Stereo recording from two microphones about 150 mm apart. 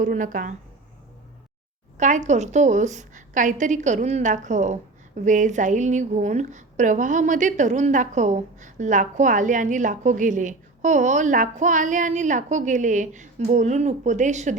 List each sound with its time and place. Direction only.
0.0 s a woman's voice: 60° right (ahead or behind)
2.0 s a woman's voice: 55° right (ahead or behind)